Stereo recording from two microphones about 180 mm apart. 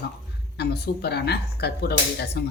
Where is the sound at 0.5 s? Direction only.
65° left (ahead or behind).